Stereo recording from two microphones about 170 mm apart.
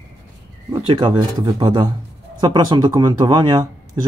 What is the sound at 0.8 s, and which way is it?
A man's voice, 30° right (ahead or behind).